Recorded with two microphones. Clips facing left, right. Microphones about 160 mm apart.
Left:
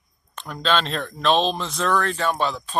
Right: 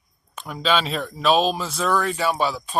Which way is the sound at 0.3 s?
5° right (ahead or behind).